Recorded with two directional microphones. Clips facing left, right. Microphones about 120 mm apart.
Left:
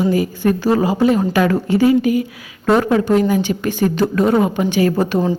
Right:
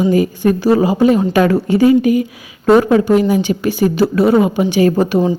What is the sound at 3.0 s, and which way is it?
A woman's voice, 10° right (ahead or behind).